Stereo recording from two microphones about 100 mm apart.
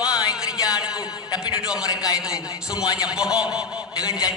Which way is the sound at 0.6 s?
40° left (ahead or behind).